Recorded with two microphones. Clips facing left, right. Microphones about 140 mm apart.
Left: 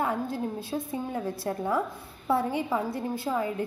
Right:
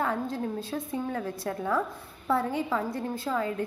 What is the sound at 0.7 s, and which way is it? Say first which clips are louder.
A woman's voice: even; 10° left (ahead or behind).